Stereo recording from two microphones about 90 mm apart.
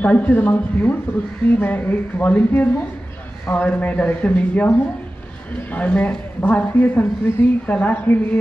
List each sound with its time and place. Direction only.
0.0 s a man's voice: 15° left (ahead or behind)